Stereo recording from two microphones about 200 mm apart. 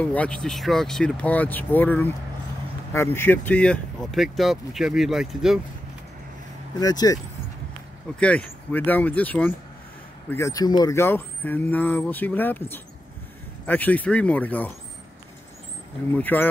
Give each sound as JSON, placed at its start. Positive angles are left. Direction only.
{"t": 0.0, "sound": "speech", "side_deg": 5}
{"t": 6.8, "sound": "speech", "side_deg": 20}
{"t": 8.2, "sound": "speech", "side_deg": 5}
{"t": 16.2, "sound": "speech", "side_deg": 10}